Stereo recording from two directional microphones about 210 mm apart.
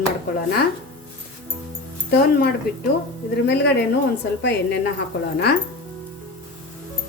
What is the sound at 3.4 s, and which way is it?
Speech, 55° left (ahead or behind).